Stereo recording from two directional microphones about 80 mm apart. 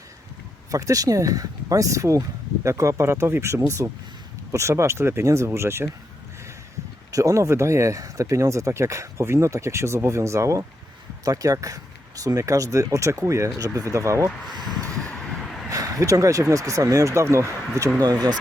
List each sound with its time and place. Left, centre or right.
0.7 s speech: right
7.1 s speech: right
14.8 s vehicle: centre
15.7 s speech: right
18.0 s speech: right